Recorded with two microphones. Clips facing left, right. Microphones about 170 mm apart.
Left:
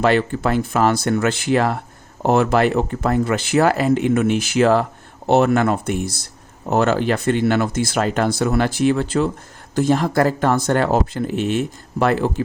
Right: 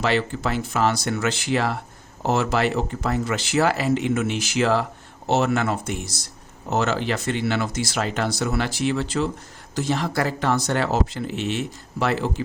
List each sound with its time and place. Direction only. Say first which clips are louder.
0.0 s speech: left 6 dB; 50° left (ahead or behind)